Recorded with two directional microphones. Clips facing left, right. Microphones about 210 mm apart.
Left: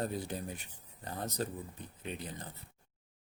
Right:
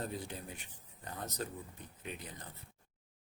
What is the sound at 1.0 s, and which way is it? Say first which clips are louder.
Speech: left 4 dB; 30° left (ahead or behind).